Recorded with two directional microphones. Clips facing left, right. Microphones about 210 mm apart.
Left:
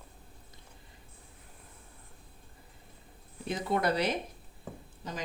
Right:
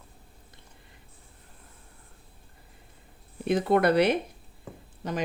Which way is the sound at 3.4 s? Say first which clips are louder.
Right 8 dB; 60° right (ahead or behind).